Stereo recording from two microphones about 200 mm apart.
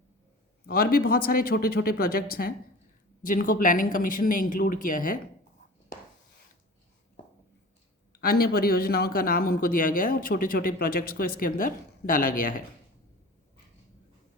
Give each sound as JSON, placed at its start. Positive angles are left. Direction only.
{"t": 0.7, "sound": "a man's voice", "side_deg": 45}
{"t": 8.1, "sound": "a man's voice", "side_deg": 50}